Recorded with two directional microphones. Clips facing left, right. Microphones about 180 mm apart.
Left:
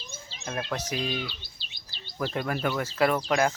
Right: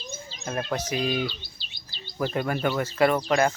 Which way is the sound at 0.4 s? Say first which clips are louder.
Right 3 dB; 5° right (ahead or behind).